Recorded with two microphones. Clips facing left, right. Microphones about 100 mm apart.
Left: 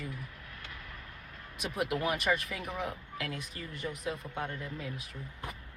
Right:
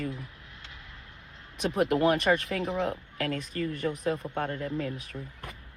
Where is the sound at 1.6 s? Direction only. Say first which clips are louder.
Right 8 dB; 55° right (ahead or behind).